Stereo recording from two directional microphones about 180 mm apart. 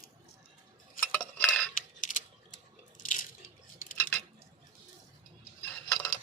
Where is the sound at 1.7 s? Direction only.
45° left (ahead or behind).